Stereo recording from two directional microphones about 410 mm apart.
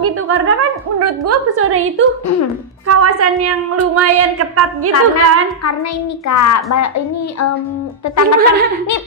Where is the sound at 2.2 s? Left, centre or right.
Left.